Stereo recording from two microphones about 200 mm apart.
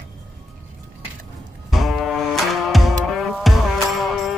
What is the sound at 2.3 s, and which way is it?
Music, centre (ahead or behind).